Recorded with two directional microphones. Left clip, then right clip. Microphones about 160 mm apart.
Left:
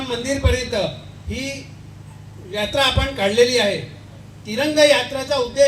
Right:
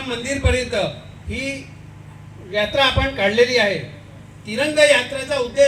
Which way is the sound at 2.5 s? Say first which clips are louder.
Right 1 dB; 90° left.